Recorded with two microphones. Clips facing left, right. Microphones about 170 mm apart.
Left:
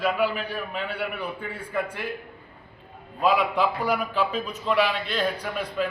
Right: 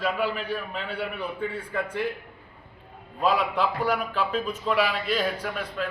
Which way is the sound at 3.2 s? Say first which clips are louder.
Left 2 dB; centre (ahead or behind).